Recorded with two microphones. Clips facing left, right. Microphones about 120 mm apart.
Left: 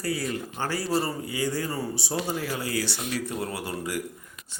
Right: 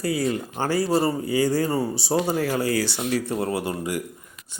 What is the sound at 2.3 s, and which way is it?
Speech, 60° right (ahead or behind).